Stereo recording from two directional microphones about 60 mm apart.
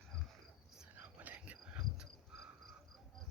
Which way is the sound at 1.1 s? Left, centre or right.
Right.